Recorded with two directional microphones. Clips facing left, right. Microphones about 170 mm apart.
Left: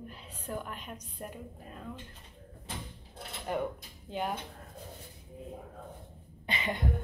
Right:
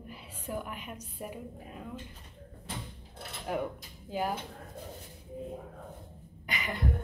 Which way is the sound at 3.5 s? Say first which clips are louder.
Even; centre (ahead or behind).